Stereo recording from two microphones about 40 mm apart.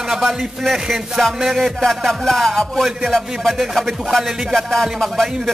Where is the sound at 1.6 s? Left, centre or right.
Centre.